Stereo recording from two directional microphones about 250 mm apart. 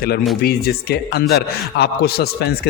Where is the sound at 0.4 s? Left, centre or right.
Left.